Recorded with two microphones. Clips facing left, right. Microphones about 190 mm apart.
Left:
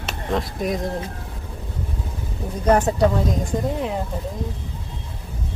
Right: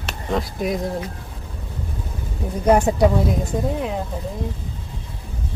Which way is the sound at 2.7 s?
10° right (ahead or behind).